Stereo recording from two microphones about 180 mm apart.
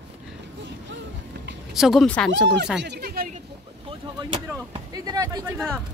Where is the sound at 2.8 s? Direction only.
65° right (ahead or behind).